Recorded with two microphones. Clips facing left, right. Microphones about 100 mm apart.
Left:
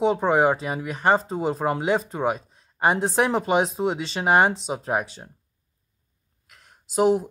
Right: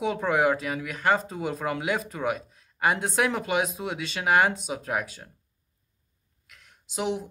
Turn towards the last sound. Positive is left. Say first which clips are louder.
# left 10 dB
turn(degrees=40)  # may be behind; listen again after turning